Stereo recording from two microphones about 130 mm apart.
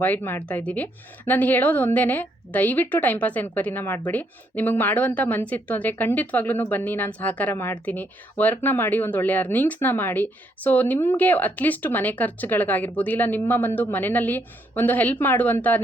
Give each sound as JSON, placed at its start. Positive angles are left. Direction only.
{"t": 0.0, "sound": "a woman's voice", "side_deg": 15}